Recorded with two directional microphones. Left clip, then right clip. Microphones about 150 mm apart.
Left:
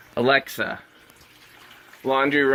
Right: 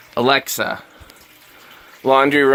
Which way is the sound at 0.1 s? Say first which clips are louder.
Right 4 dB; 30° right (ahead or behind).